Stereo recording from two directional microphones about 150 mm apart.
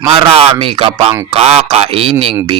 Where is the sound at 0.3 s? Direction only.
40° right (ahead or behind).